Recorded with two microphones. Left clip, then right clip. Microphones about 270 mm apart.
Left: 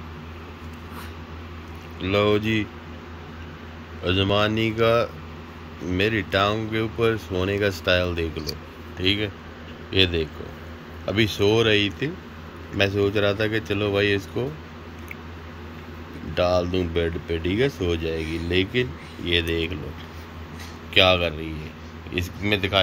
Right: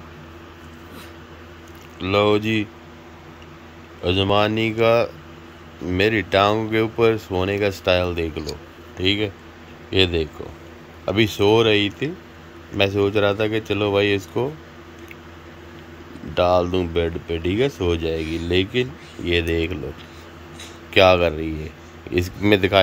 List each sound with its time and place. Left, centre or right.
2.0 s speech: centre
4.0 s speech: centre
16.3 s speech: centre
20.9 s speech: centre